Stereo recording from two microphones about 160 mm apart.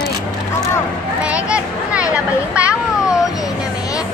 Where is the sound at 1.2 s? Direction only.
5° right (ahead or behind).